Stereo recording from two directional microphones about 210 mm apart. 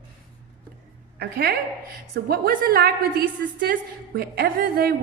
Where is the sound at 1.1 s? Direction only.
50° right (ahead or behind).